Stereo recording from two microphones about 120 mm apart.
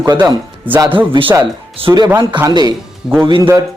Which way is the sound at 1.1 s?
45° right (ahead or behind).